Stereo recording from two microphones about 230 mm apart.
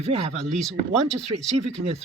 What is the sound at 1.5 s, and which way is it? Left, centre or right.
Speech, right.